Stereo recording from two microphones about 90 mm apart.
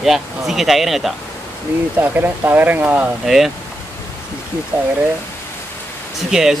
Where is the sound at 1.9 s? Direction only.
20° right (ahead or behind).